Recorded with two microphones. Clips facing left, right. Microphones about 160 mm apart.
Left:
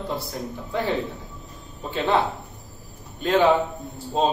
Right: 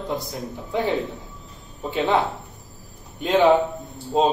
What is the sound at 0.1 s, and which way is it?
Speech, 20° right (ahead or behind).